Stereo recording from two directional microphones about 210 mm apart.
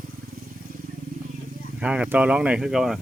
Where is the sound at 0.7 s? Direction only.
45° right (ahead or behind).